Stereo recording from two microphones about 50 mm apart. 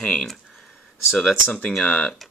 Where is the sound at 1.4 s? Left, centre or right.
Left.